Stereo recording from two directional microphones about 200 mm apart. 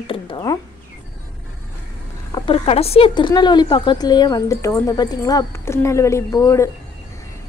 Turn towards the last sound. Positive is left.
turn(degrees=15)  # may be behind; listen again after turning